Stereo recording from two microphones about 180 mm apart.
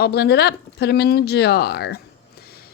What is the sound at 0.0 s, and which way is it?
Speech, 60° left (ahead or behind).